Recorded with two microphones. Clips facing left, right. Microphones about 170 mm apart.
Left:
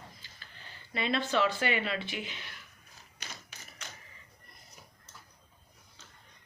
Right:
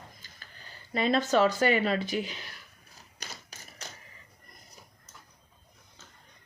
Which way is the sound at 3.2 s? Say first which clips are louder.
Right 2 dB; 40° right (ahead or behind).